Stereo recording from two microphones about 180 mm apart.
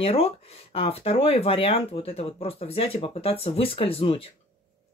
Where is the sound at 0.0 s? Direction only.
30° left (ahead or behind).